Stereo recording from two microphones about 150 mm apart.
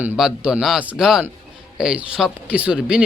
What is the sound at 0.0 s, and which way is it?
Speech, 10° right (ahead or behind).